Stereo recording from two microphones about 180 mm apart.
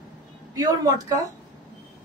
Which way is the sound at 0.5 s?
20° right (ahead or behind).